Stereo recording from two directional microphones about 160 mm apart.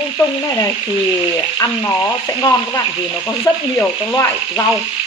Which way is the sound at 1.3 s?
20° left (ahead or behind).